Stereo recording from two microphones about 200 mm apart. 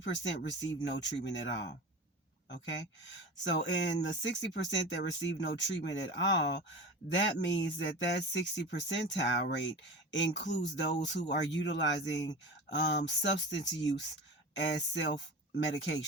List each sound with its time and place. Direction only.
0.0 s speech: 65° left (ahead or behind)